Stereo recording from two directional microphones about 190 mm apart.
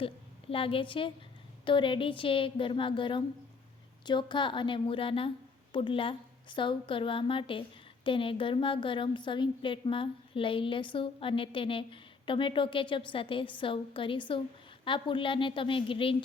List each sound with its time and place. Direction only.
0.5 s a woman's voice: 30° left (ahead or behind)